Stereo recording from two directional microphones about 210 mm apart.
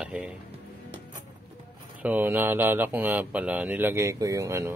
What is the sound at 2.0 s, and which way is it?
Speech, 10° right (ahead or behind).